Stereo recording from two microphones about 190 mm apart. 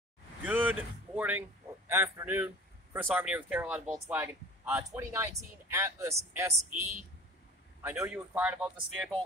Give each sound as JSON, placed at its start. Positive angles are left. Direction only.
{"t": 0.4, "sound": "a sound", "side_deg": -10}
{"t": 1.9, "sound": "speech", "side_deg": -10}
{"t": 6.7, "sound": "a woman's voice", "side_deg": -40}
{"t": 7.8, "sound": "speech", "side_deg": -10}